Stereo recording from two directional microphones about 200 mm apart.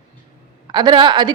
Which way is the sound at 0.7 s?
20° right (ahead or behind).